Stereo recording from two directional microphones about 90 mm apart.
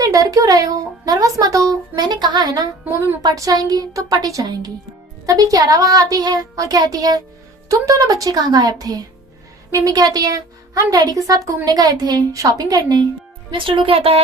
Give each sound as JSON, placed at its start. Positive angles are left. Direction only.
{"t": 0.0, "sound": "a woman's voice", "side_deg": -40}
{"t": 13.5, "sound": "speech", "side_deg": -70}